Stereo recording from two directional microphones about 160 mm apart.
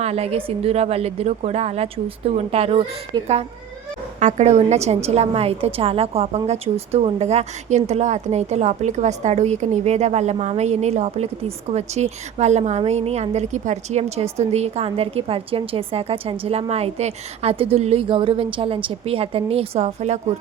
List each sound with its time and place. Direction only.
0.0 s a woman's voice: 40° right (ahead or behind)
4.2 s a woman's voice: 45° right (ahead or behind)